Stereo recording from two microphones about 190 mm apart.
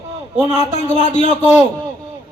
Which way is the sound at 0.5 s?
35° left (ahead or behind).